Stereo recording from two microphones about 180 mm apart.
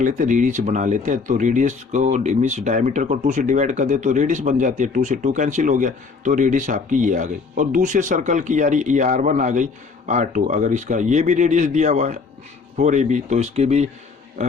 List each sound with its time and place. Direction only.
0.0 s speech: 45° right (ahead or behind)